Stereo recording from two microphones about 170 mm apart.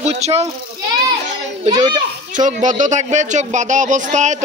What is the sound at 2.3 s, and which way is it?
Speech, 50° right (ahead or behind).